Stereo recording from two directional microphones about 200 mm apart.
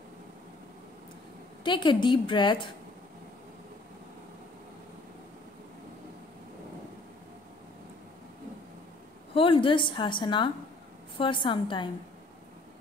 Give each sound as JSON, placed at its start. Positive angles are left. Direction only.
{"t": 1.6, "sound": "a woman's voice", "side_deg": 25}
{"t": 9.3, "sound": "a woman's voice", "side_deg": 25}